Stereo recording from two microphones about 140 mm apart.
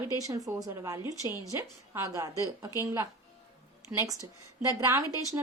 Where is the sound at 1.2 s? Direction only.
25° left (ahead or behind).